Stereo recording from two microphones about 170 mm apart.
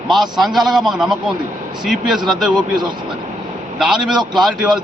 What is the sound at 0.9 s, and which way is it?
A man's voice, 5° right (ahead or behind).